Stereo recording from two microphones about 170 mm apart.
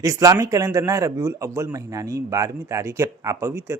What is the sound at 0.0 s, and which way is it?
Speech, 20° right (ahead or behind).